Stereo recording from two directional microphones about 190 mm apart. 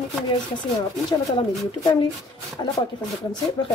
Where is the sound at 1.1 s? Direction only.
20° left (ahead or behind).